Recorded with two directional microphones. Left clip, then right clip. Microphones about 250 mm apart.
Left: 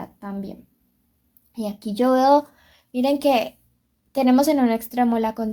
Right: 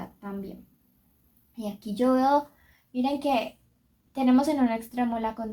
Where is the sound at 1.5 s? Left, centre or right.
Left.